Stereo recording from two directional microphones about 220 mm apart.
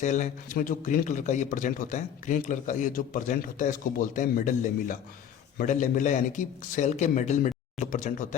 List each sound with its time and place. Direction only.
0.0 s a man's voice: 35° left (ahead or behind)